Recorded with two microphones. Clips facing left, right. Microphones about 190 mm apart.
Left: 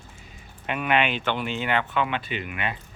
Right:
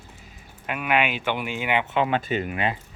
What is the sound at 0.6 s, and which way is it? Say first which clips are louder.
Speech: even; 5° right (ahead or behind).